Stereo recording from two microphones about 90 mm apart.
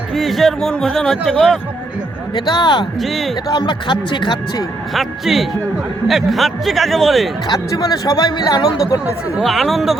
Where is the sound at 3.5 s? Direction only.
55° left (ahead or behind).